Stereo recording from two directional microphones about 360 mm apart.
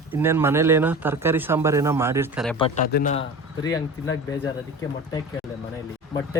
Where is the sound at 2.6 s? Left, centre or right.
Left.